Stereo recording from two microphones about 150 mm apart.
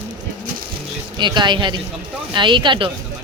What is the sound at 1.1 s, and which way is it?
Speech, 30° right (ahead or behind).